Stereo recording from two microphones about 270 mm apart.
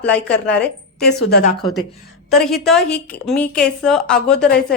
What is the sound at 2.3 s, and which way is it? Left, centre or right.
A woman's voice, centre.